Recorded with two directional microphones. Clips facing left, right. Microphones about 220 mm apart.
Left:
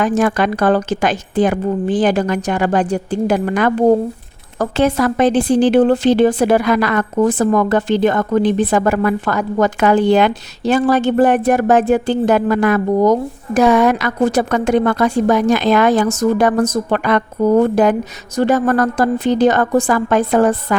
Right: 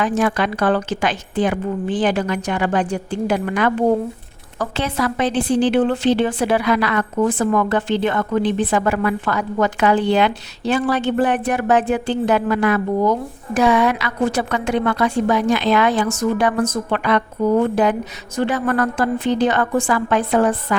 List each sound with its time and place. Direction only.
0.0 s speech: 45° left (ahead or behind)